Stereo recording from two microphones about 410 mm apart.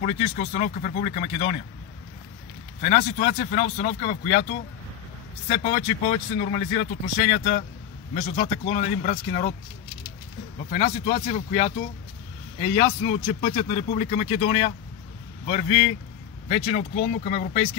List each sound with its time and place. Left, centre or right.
0.0 s speech: centre
2.8 s speech: centre
10.7 s speech: centre
12.7 s speech: centre